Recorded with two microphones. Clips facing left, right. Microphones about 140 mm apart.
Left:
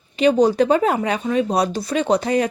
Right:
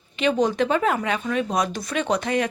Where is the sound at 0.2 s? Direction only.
35° left (ahead or behind).